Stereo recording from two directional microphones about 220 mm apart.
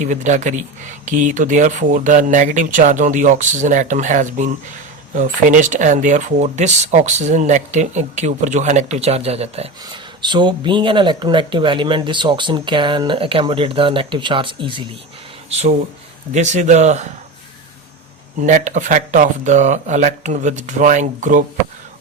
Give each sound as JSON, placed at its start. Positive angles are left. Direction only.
{"t": 0.0, "sound": "speech", "side_deg": -35}
{"t": 18.3, "sound": "speech", "side_deg": -35}